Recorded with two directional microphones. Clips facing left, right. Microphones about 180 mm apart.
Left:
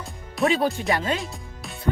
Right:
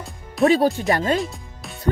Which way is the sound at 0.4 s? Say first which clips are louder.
Right 5 dB; 40° right (ahead or behind).